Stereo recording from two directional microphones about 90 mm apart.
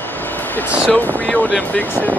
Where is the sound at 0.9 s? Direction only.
15° left (ahead or behind).